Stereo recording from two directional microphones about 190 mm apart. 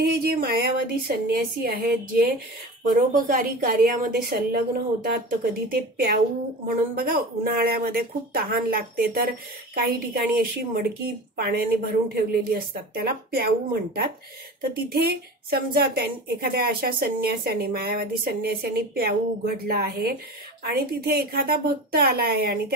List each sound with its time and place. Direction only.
0.0 s a woman's voice: 50° right (ahead or behind)
14.6 s a woman's voice: 50° right (ahead or behind)